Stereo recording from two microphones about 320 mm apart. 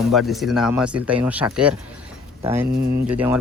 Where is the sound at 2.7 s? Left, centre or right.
Right.